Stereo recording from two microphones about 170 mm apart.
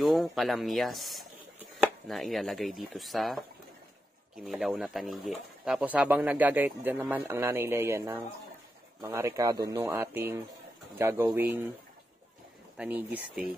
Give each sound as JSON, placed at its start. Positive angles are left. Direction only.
{"t": 0.0, "sound": "speech", "side_deg": 0}
{"t": 12.7, "sound": "speech", "side_deg": -10}